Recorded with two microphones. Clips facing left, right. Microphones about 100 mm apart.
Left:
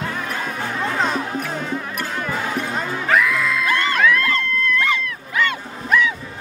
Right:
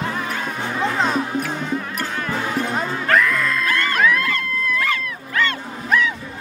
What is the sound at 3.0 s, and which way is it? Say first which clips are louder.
Music: even; 5° left (ahead or behind).